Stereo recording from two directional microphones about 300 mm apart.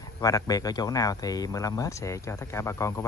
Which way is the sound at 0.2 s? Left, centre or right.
Centre.